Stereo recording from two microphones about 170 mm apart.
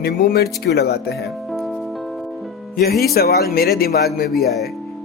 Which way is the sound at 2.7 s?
65° left (ahead or behind).